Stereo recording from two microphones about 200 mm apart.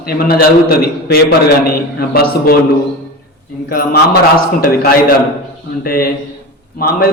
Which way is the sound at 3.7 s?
50° left (ahead or behind).